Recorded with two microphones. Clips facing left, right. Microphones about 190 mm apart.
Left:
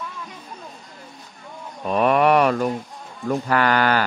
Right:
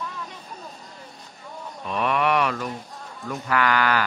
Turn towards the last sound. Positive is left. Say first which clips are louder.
# left 3 dB
turn(degrees=35)  # may be behind; listen again after turning